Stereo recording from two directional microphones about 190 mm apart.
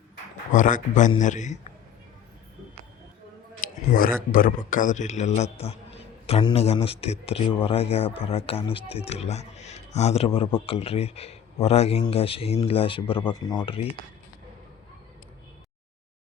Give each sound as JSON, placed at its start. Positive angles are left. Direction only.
{"t": 0.5, "sound": "a man's voice", "side_deg": 40}
{"t": 3.6, "sound": "a man's voice", "side_deg": 50}